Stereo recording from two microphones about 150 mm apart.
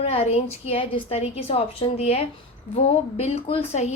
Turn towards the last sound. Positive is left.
turn(degrees=45)  # may be behind; listen again after turning